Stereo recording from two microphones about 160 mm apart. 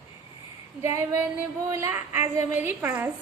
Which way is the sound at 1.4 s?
15° right (ahead or behind).